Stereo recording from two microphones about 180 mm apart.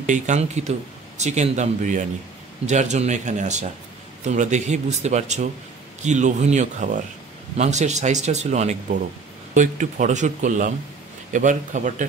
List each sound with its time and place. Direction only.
0.0 s speech: 45° right (ahead or behind)